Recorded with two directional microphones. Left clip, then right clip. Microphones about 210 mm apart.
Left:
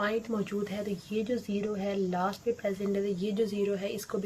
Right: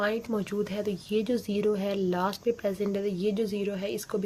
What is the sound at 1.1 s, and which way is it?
Speech, 45° right (ahead or behind).